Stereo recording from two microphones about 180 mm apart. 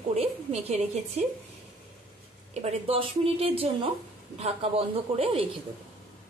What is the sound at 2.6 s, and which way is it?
Speech, 35° right (ahead or behind).